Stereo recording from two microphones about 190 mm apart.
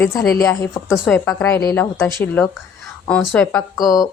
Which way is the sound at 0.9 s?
Centre (ahead or behind).